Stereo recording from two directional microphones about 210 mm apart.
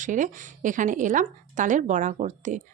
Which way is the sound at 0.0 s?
40° right (ahead or behind).